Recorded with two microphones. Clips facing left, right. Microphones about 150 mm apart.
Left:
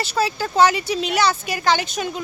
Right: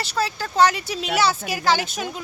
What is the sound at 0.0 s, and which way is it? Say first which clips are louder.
Speech: left 3 dB; centre (ahead or behind).